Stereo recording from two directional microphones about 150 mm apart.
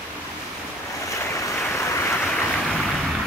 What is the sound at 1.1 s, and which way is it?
Waves, 20° left (ahead or behind).